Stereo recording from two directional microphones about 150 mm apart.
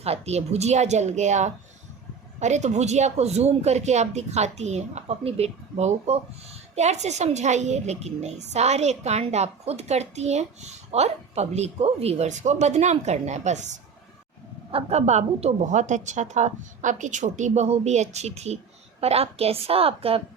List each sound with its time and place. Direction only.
0.0 s a woman's voice: 45° right (ahead or behind)
14.7 s a woman's voice: 40° right (ahead or behind)